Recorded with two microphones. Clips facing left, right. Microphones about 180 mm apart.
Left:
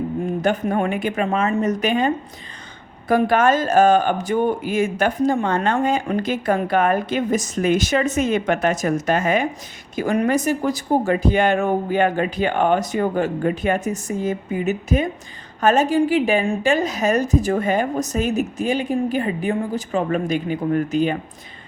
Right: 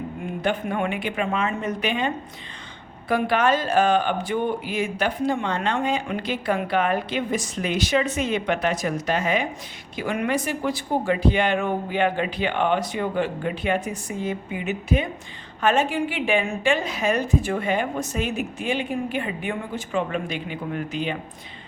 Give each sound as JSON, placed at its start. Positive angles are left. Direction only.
{"t": 0.4, "sound": "a woman's voice", "side_deg": 40}